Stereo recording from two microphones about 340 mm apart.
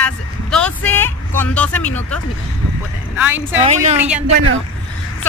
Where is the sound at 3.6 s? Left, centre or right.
Centre.